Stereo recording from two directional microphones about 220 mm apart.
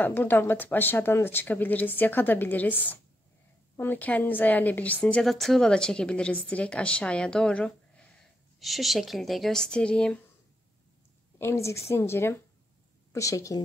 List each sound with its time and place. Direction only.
0.0 s a woman's voice: 10° left (ahead or behind)
11.3 s speech: 10° left (ahead or behind)